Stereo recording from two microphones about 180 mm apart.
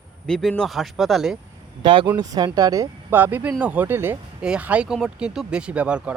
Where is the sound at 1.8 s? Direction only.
30° right (ahead or behind); by 6.1 s 5° right (ahead or behind).